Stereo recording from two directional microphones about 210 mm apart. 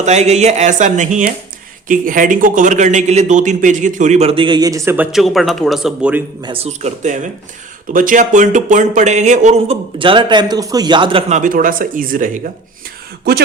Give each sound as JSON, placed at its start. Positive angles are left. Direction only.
{"t": 0.0, "sound": "speech", "side_deg": -30}
{"t": 6.4, "sound": "speech", "side_deg": -25}